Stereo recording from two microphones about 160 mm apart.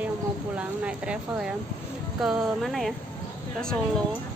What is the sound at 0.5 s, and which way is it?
Speech, 5° right (ahead or behind).